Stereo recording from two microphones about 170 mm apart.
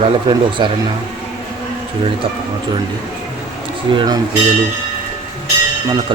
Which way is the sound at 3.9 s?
20° right (ahead or behind).